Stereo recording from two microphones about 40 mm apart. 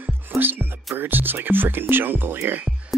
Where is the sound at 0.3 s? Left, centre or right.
Right.